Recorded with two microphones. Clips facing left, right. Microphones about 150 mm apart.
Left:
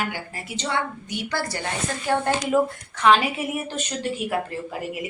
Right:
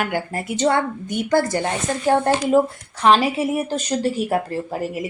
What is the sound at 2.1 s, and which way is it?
A woman's voice, 35° right (ahead or behind).